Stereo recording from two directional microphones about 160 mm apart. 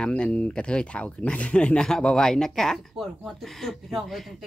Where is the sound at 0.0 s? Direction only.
5° left (ahead or behind).